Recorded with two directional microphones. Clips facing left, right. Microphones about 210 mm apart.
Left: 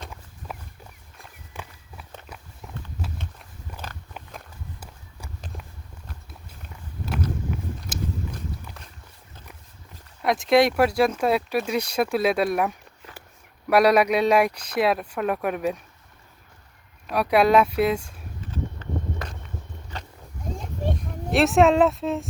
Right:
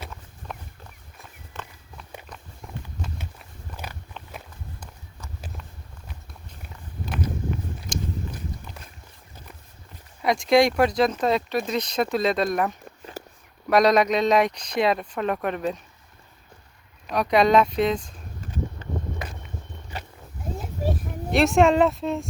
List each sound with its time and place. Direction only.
1.5 s walk: 15° left (ahead or behind)
3.2 s walk: 10° right (ahead or behind)
7.9 s biting: 5° left (ahead or behind)
10.2 s speech: 5° left (ahead or behind)
13.2 s a sound: 40° right (ahead or behind)
13.7 s speech: 10° left (ahead or behind)
17.1 s speech: 5° left (ahead or behind)
18.5 s a sound: 15° right (ahead or behind); by 22.3 s centre (ahead or behind)